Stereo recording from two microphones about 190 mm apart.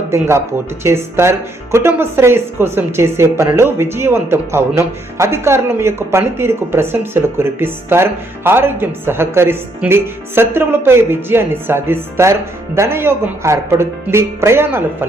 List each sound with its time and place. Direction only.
0.1 s speech: 15° right (ahead or behind)